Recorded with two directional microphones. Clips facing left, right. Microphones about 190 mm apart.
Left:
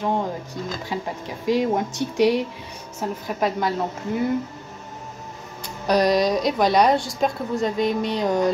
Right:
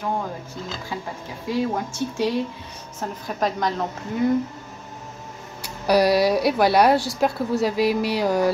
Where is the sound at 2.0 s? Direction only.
15° left (ahead or behind).